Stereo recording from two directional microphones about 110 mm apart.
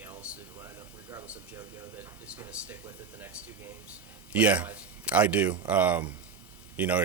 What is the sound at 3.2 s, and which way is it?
Speech, 20° right (ahead or behind).